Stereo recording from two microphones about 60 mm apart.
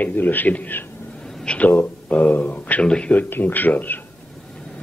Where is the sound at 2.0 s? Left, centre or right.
Left.